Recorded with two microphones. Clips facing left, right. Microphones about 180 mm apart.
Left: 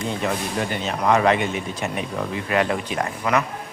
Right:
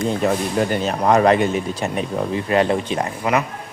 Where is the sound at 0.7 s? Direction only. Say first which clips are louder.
Right 1 dB; 40° right (ahead or behind); by 3.4 s 20° right (ahead or behind).